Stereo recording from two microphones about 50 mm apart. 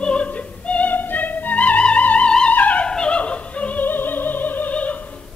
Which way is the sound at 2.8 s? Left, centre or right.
Centre.